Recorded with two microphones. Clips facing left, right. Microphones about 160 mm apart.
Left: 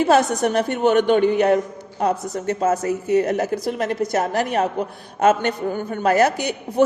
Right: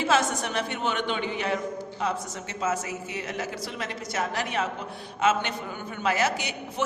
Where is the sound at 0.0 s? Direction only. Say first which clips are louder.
Left 8 dB; 50° left (ahead or behind).